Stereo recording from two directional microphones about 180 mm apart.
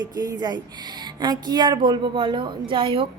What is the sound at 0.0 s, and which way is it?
A woman's voice, 20° right (ahead or behind).